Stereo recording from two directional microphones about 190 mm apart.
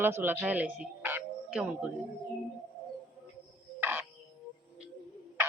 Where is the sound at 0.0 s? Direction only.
10° right (ahead or behind).